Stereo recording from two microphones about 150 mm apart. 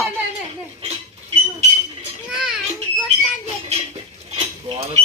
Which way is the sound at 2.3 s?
5° right (ahead or behind).